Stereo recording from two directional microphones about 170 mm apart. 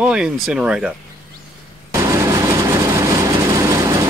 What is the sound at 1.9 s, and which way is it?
Vehicle, 15° right (ahead or behind).